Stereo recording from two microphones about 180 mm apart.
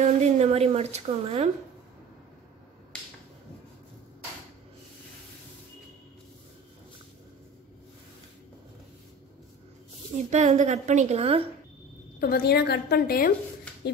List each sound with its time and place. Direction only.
0.0 s a woman's voice: 40° right (ahead or behind)
10.3 s a woman's voice: 40° right (ahead or behind)
12.2 s a woman's voice: 55° left (ahead or behind)